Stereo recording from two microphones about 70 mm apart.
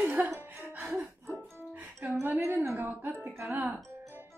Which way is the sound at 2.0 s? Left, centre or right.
Centre.